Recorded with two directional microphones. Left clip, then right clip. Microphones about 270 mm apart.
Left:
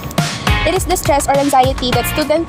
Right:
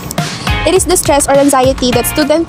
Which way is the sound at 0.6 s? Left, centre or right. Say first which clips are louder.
Right 6 dB; right.